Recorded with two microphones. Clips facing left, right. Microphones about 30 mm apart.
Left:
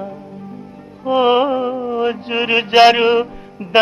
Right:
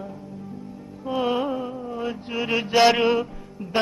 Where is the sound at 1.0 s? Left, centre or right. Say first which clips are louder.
Left 10 dB; left.